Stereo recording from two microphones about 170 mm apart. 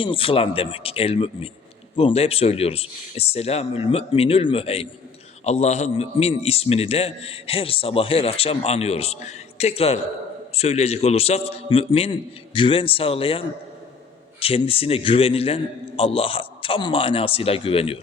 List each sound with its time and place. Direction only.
0.0 s a man's voice: 30° left (ahead or behind)